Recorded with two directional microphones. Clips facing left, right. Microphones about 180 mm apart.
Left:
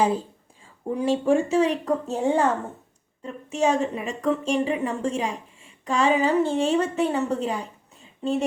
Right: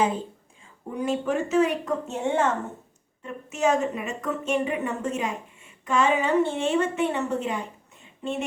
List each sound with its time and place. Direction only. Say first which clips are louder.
0.9 s a woman's voice: left 4 dB; 30° left (ahead or behind)